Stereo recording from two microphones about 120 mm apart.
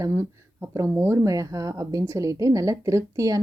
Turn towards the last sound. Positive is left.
turn(degrees=-30)  # may be behind; listen again after turning